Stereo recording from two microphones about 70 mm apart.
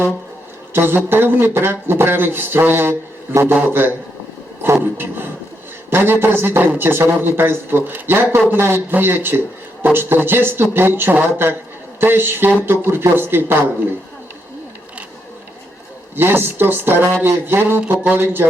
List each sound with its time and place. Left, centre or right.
0.7 s a man's voice: right
16.1 s a man's voice: right